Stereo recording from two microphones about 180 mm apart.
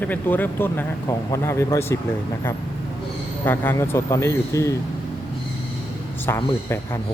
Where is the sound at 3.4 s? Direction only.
15° left (ahead or behind).